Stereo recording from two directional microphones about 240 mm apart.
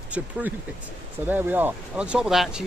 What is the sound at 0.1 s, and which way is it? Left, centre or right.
Speech, centre.